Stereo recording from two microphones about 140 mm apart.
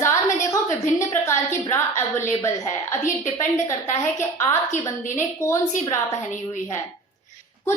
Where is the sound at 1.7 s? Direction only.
20° left (ahead or behind).